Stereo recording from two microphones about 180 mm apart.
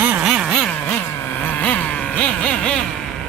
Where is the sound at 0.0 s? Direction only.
5° right (ahead or behind).